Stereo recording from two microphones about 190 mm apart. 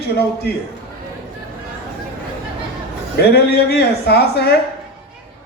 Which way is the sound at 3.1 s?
60° left (ahead or behind).